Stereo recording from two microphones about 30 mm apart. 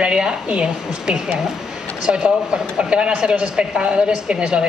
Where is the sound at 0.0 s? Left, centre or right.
Right.